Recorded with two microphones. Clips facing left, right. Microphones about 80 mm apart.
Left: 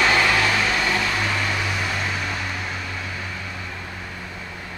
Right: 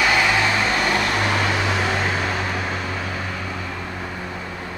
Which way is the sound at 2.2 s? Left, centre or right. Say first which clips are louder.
Right 4 dB; right.